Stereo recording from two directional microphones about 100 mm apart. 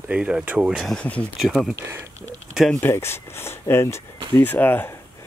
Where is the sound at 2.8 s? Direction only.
25° left (ahead or behind).